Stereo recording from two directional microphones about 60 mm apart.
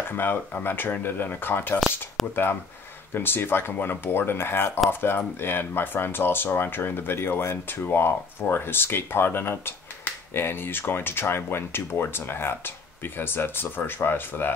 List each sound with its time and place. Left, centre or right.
0.1 s speech: left
2.2 s speech: centre
3.2 s speech: left